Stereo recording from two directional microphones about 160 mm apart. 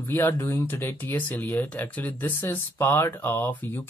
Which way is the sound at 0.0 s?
15° left (ahead or behind).